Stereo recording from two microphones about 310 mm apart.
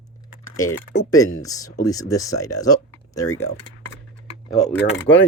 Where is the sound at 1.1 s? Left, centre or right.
Centre.